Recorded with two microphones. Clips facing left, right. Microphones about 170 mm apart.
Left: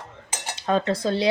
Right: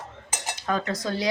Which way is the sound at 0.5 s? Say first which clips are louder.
Left 5 dB; 25° left (ahead or behind).